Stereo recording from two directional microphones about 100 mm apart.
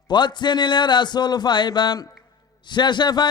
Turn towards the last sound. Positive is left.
turn(degrees=50)  # may be behind; listen again after turning